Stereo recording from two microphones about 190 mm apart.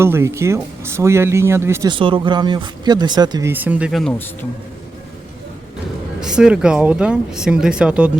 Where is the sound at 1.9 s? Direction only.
25° right (ahead or behind); by 4.4 s centre (ahead or behind).